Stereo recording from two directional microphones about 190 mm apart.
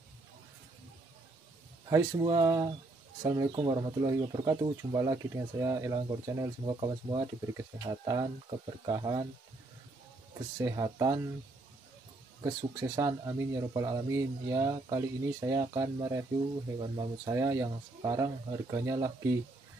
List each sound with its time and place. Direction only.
1.9 s speech: 20° right (ahead or behind)
10.6 s speech: 15° right (ahead or behind)
12.4 s speech: 20° right (ahead or behind)